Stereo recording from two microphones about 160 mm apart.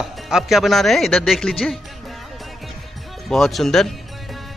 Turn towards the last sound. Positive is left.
turn(degrees=0)  # may be behind; listen again after turning